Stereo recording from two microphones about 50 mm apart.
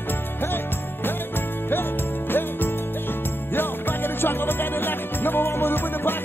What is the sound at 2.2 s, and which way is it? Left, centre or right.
Music, left.